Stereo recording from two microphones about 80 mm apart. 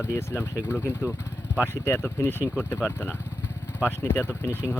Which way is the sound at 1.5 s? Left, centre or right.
Left.